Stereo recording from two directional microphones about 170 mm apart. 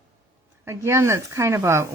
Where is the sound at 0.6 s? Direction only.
15° right (ahead or behind).